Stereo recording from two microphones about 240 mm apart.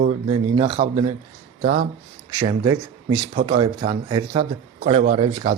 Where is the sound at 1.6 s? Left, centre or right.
Right.